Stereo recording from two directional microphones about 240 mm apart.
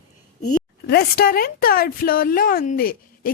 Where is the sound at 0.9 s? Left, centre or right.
Left.